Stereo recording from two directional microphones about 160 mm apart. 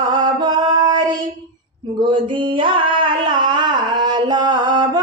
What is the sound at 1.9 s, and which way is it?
Singing, 30° right (ahead or behind).